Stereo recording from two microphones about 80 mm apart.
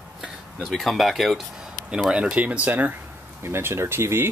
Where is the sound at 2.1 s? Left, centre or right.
Centre; by 4.3 s right.